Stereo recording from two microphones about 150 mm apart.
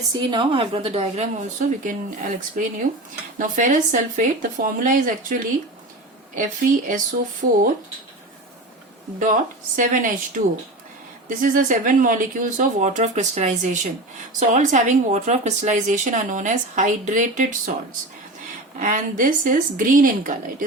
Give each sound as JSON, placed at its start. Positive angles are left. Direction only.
{"t": 0.1, "sound": "a woman's voice", "side_deg": -30}
{"t": 1.8, "sound": "speech", "side_deg": -65}
{"t": 9.1, "sound": "speech", "side_deg": -60}
{"t": 18.8, "sound": "speech", "side_deg": -60}